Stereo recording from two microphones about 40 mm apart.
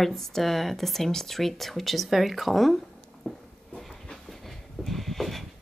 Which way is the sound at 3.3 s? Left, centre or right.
Centre.